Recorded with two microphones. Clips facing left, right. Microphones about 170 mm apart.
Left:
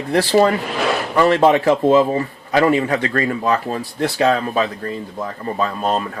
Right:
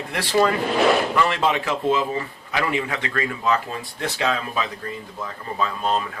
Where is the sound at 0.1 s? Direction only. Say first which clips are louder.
Left 6 dB; 35° left (ahead or behind).